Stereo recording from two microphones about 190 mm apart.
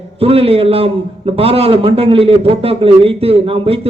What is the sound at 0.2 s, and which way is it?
A man's voice, 30° right (ahead or behind).